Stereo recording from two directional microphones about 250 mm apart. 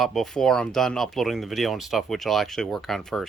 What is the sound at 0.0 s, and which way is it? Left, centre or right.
Speech, centre.